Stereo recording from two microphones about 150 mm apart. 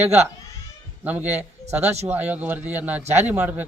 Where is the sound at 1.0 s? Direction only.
10° right (ahead or behind).